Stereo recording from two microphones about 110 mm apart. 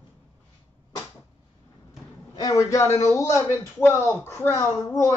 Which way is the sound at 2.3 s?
35° left (ahead or behind).